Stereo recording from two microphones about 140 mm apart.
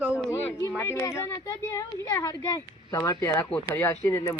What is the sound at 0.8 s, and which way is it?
Speech, 20° left (ahead or behind).